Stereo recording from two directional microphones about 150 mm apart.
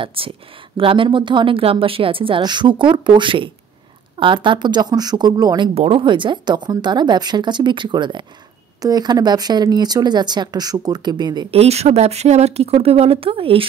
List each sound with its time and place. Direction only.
0.0 s speech: 40° right (ahead or behind)
11.5 s speech: 45° right (ahead or behind)